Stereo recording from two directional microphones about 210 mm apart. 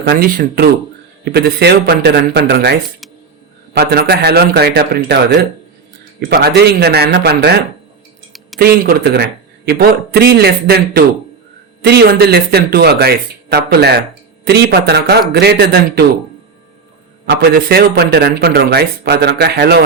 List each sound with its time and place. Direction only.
0.0 s a man's voice: 50° right (ahead or behind)
3.8 s a man's voice: 50° right (ahead or behind)
6.2 s a man's voice: 50° right (ahead or behind)
8.5 s a man's voice: 50° right (ahead or behind)
17.2 s a man's voice: 50° right (ahead or behind)